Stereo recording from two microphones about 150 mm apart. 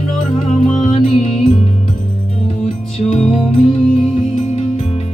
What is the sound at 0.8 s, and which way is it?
Music, 50° left (ahead or behind).